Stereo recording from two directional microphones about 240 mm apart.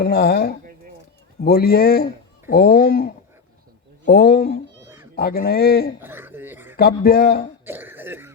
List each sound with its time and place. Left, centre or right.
0.0 s a man's voice: left
4.8 s cat: centre
5.1 s a man's voice: left
6.0 s a sound: centre
6.7 s a man's voice: left
7.6 s cough: centre